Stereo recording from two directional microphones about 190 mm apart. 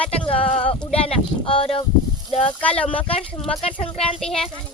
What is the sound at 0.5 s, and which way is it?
Speech, 30° left (ahead or behind).